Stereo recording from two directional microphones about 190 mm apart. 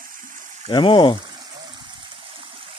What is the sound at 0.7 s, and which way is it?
Speech, 25° left (ahead or behind).